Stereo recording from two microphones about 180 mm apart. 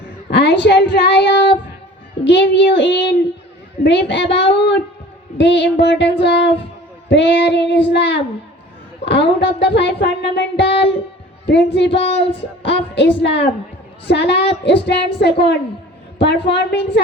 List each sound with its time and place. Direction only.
0.3 s speech: 75° left (ahead or behind)
2.2 s child singing: 75° left (ahead or behind)